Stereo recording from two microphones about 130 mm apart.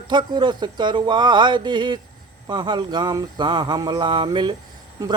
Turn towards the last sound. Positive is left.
turn(degrees=-30)  # may be behind; listen again after turning